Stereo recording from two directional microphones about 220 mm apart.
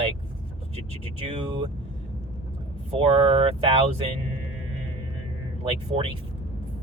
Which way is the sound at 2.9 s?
25° right (ahead or behind).